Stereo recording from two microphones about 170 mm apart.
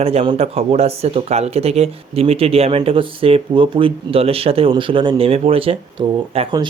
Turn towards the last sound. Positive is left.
turn(degrees=-35)  # may be behind; listen again after turning